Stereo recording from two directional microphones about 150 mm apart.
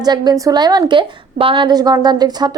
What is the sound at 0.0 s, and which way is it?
A woman's voice, 25° right (ahead or behind).